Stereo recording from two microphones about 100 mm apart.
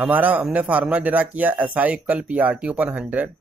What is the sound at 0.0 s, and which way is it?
A man's voice, 15° right (ahead or behind).